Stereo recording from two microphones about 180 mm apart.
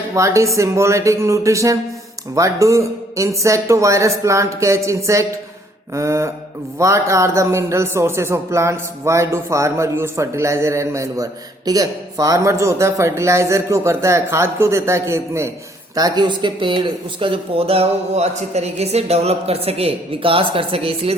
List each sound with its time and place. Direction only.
0.1 s a man's voice: 15° right (ahead or behind)